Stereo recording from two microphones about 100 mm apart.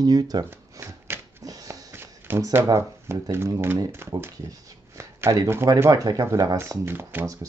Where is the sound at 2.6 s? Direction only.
30° right (ahead or behind).